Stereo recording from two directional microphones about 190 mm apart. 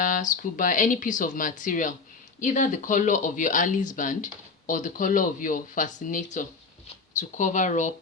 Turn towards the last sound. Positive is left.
turn(degrees=40)  # may be behind; listen again after turning